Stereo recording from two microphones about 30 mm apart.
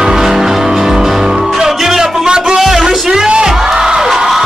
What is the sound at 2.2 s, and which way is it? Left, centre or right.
Music, right.